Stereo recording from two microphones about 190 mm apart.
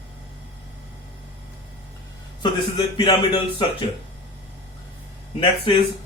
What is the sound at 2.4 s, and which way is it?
Speech, 25° left (ahead or behind).